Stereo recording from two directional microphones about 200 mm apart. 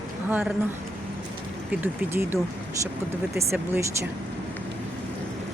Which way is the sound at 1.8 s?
10° right (ahead or behind).